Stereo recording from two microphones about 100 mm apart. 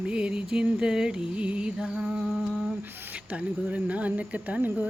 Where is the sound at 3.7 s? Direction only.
15° right (ahead or behind).